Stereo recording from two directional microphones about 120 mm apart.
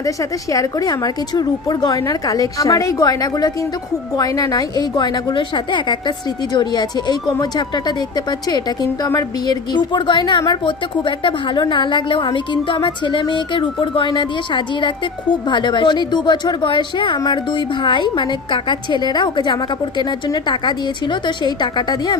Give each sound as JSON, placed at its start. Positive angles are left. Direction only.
{"t": 0.0, "sound": "a woman's voice", "side_deg": 30}